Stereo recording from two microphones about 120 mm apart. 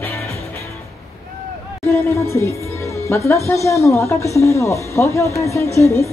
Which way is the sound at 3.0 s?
20° left (ahead or behind).